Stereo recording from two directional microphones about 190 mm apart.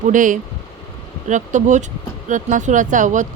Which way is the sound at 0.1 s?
45° right (ahead or behind).